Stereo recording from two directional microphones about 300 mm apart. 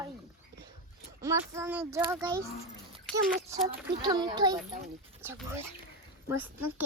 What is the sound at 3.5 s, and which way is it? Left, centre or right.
A child's voice, centre.